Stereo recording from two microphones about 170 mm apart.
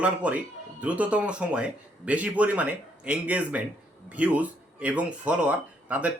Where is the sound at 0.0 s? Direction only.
10° right (ahead or behind).